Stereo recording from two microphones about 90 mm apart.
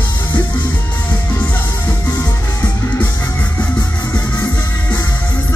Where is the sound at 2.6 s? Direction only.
20° left (ahead or behind).